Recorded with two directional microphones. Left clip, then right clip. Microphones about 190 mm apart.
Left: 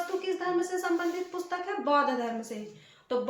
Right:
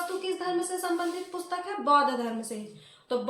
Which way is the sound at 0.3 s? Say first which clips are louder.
Left 1 dB; centre (ahead or behind).